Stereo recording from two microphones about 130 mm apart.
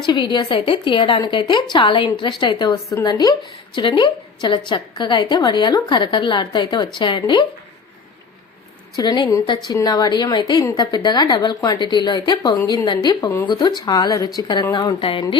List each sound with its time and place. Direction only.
0.0 s a woman's voice: 35° left (ahead or behind)
9.0 s a woman's voice: 35° left (ahead or behind)